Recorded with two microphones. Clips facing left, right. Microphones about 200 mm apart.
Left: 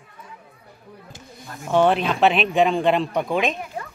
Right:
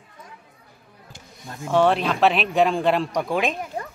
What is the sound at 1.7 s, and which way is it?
Speech, centre (ahead or behind).